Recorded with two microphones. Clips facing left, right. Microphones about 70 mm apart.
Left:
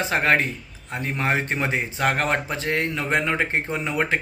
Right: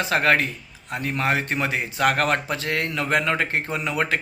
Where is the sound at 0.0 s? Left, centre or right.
Left.